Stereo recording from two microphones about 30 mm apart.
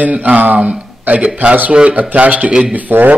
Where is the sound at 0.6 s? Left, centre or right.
Right.